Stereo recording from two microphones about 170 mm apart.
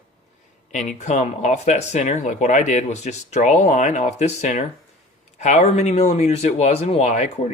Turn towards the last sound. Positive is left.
turn(degrees=40)  # may be behind; listen again after turning